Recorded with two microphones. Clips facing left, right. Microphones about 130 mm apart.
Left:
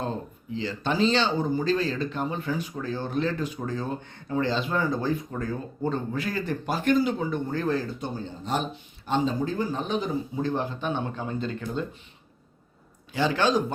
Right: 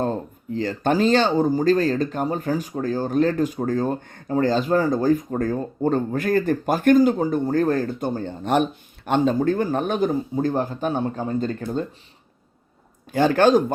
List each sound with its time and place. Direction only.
0.5 s speech: 50° right (ahead or behind)
13.1 s speech: 50° right (ahead or behind)